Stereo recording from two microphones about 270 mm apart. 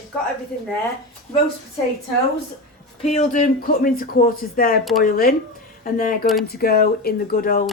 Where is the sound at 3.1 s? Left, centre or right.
Left.